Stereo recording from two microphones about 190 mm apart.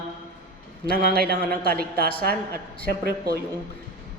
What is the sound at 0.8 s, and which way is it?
A man's voice, 55° right (ahead or behind).